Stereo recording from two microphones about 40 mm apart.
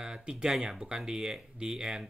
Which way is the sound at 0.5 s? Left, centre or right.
Centre.